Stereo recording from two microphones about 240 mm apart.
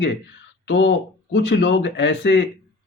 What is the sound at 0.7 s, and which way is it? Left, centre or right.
Speech, left.